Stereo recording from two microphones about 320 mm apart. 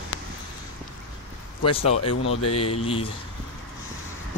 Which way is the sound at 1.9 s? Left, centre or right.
Left.